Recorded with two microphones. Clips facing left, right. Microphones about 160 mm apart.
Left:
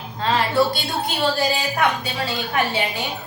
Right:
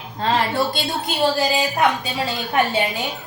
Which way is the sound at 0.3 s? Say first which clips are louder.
Left 1 dB; 20° right (ahead or behind).